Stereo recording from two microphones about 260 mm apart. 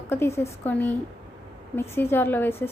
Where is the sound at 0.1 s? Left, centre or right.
Centre.